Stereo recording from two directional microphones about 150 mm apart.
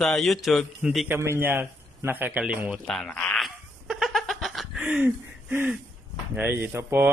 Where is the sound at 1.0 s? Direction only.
15° right (ahead or behind).